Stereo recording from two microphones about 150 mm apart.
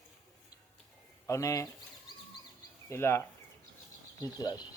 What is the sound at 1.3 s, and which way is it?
Speech, 20° left (ahead or behind).